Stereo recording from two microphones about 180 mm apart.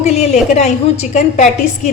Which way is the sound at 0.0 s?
35° left (ahead or behind).